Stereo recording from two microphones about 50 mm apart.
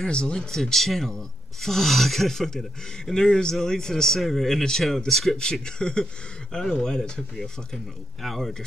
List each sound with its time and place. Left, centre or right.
0.0 s speech: centre
5.4 s speech: centre
8.2 s a man's voice: centre